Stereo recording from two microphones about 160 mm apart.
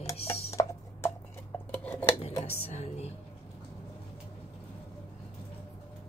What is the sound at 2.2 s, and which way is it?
Speech, 40° left (ahead or behind).